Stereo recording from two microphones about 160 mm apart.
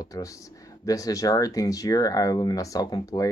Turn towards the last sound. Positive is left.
turn(degrees=25)  # may be behind; listen again after turning